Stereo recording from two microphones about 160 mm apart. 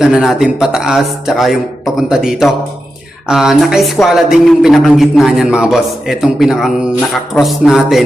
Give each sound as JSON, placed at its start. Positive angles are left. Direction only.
{"t": 0.0, "sound": "speech", "side_deg": -5}